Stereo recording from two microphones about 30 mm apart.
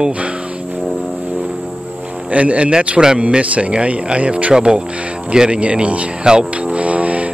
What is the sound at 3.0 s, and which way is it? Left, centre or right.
Speech, centre.